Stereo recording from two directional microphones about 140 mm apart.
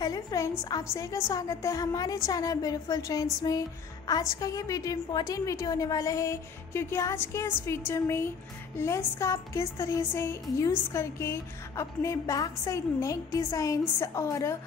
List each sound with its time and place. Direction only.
0.0 s speech: 25° left (ahead or behind)